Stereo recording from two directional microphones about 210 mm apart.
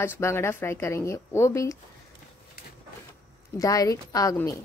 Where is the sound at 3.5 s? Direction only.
15° left (ahead or behind).